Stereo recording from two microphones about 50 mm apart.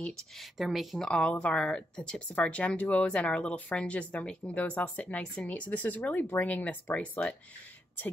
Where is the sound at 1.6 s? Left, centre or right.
Centre.